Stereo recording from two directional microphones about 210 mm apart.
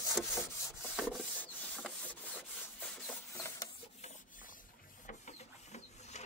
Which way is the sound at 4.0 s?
40° left (ahead or behind).